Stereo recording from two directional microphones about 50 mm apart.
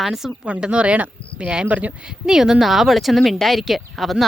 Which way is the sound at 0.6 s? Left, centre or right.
Right.